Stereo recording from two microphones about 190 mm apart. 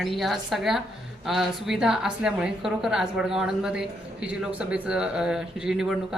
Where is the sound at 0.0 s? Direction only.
Centre (ahead or behind).